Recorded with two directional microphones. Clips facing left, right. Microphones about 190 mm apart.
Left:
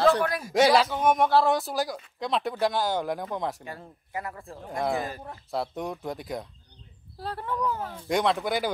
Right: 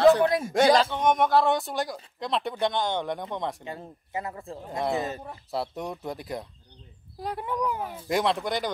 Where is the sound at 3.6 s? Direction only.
20° right (ahead or behind).